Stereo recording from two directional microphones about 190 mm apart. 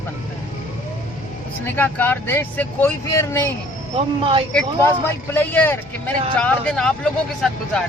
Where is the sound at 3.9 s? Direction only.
25° right (ahead or behind).